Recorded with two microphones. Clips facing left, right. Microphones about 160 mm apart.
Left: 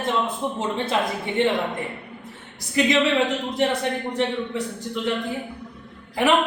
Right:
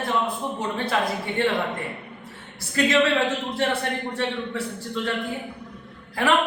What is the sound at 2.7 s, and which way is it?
A man's voice, 15° left (ahead or behind).